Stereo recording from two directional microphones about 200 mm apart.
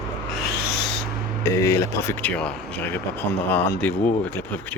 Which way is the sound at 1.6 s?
15° left (ahead or behind).